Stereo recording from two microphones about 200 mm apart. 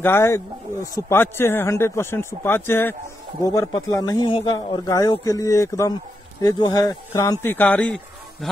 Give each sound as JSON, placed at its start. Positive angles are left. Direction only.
{"t": 0.0, "sound": "speech", "side_deg": 10}